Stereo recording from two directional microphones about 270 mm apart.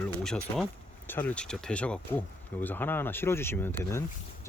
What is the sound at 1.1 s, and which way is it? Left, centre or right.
Speech, centre.